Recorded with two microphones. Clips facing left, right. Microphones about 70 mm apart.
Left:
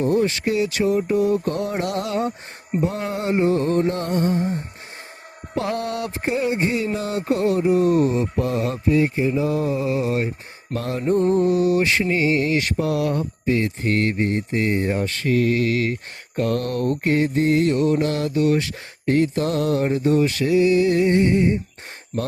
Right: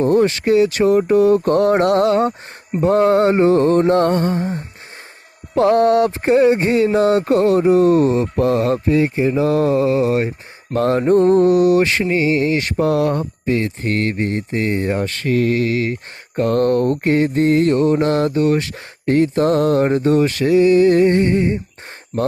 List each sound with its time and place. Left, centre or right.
0.0 s speech: right
2.8 s mantra: right
5.5 s music: right
6.2 s speech: right
9.1 s mantra: right
9.9 s music: right
10.8 s mantra: right
12.1 s speech: right